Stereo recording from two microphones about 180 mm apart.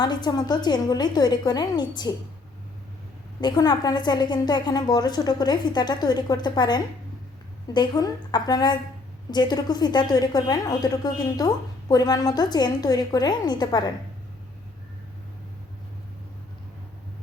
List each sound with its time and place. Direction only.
0.0 s a woman's voice: 25° left (ahead or behind)
3.4 s a woman's voice: 25° left (ahead or behind)